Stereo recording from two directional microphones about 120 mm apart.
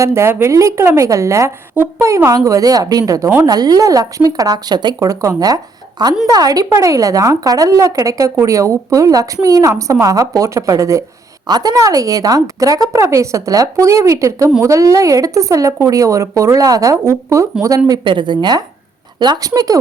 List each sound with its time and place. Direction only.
0.0 s a woman's voice: 20° right (ahead or behind); by 4.9 s 35° right (ahead or behind)
4.9 s a woman's voice: 25° right (ahead or behind)